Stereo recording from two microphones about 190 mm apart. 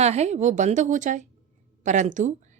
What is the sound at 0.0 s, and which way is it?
Speech, 35° right (ahead or behind).